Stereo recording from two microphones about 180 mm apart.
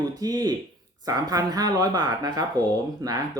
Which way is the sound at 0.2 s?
20° right (ahead or behind).